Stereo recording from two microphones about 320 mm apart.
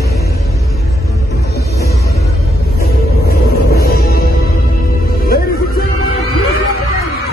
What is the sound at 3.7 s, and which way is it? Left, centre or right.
Music, left.